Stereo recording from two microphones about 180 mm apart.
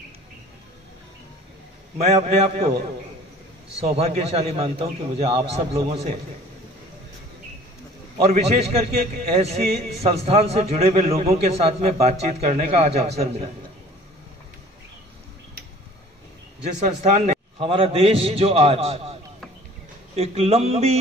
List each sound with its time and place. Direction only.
2.0 s a man's voice: 40° right (ahead or behind)
3.8 s a man's voice: 35° right (ahead or behind)
8.2 s a man's voice: 35° right (ahead or behind)
16.8 s speech: 45° right (ahead or behind)
17.6 s a man's voice: 30° right (ahead or behind)
20.2 s a man's voice: 35° right (ahead or behind)